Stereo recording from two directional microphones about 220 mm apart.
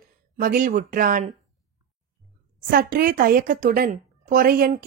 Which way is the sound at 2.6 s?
40° right (ahead or behind).